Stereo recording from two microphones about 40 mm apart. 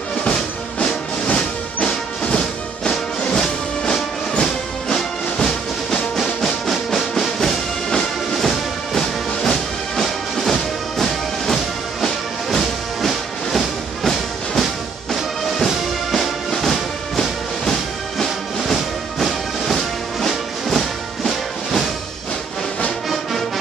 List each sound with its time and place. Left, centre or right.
0.2 s music: left
6.1 s music: centre